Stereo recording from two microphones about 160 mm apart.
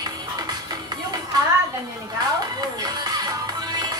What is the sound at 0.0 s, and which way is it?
Music, 25° right (ahead or behind).